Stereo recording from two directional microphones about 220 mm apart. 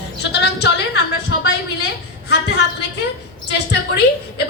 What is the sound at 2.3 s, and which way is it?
A woman's voice, 50° left (ahead or behind).